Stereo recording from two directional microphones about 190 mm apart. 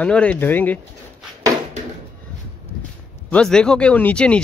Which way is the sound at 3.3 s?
5° left (ahead or behind).